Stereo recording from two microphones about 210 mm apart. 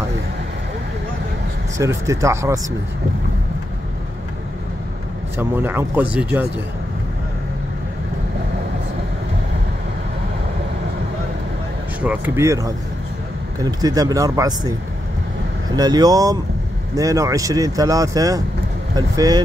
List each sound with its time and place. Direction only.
1.8 s speech: 15° right (ahead or behind)
5.4 s speech: 10° right (ahead or behind)
12.0 s speech: 10° right (ahead or behind)
15.7 s speech: 20° right (ahead or behind)